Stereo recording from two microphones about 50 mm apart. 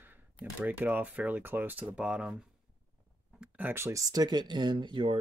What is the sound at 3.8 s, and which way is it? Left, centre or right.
Speech, right.